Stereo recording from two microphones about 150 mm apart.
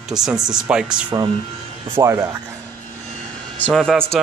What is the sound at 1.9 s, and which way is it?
Speech, 20° right (ahead or behind).